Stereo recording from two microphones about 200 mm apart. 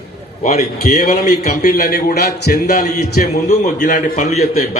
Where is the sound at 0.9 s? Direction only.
45° left (ahead or behind).